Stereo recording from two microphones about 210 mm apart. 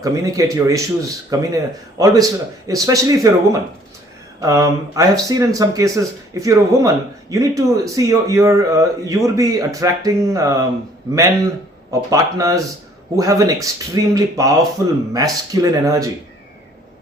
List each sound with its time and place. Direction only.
0.0 s speech: 15° right (ahead or behind)